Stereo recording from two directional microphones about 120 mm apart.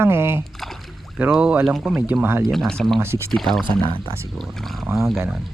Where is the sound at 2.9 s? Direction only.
20° right (ahead or behind).